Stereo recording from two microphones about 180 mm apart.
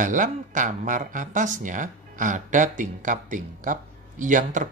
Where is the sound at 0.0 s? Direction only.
45° right (ahead or behind).